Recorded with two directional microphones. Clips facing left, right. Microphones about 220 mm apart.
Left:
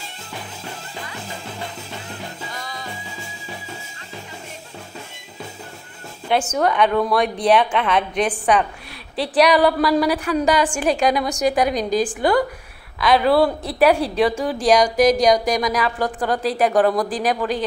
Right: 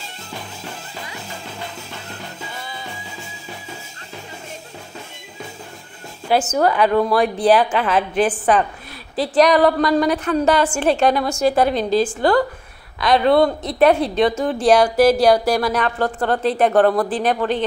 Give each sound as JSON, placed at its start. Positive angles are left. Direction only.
{"t": 2.5, "sound": "music", "side_deg": -5}
{"t": 6.3, "sound": "a woman's voice", "side_deg": -5}
{"t": 13.0, "sound": "a woman's voice", "side_deg": 5}